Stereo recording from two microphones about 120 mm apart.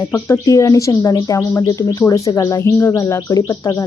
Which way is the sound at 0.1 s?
25° left (ahead or behind).